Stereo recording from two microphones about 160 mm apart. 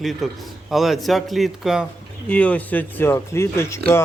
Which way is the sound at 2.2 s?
10° left (ahead or behind).